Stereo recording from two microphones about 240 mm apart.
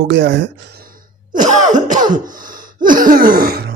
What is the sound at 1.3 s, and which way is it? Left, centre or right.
Throat clearing, right.